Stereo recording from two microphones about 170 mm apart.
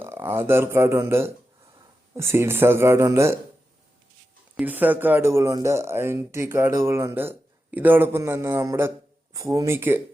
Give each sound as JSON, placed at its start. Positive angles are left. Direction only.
{"t": 0.0, "sound": "speech", "side_deg": -15}
{"t": 4.5, "sound": "speech", "side_deg": -10}